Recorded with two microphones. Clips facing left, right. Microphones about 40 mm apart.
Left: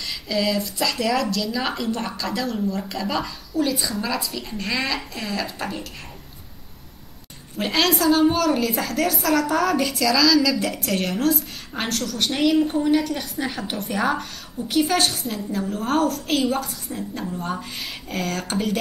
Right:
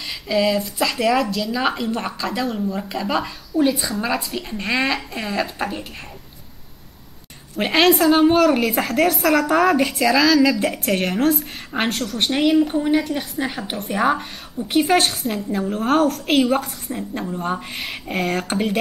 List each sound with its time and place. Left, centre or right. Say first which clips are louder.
0.0 s a woman's voice: right 4 dB; centre
4.0 s speech: right 3 dB; right
7.5 s a woman's voice: right 5 dB; right; by 13.9 s centre
13.9 s speech: right 4 dB; right
14.7 s a woman's voice: right 3 dB; right